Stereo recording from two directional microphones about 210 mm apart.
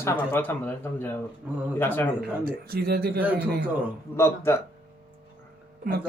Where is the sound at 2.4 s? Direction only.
45° right (ahead or behind).